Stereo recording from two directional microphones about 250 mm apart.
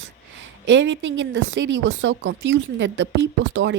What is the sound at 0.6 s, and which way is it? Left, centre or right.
A woman's voice, right.